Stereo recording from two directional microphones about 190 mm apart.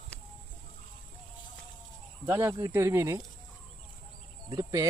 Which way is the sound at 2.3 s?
15° right (ahead or behind).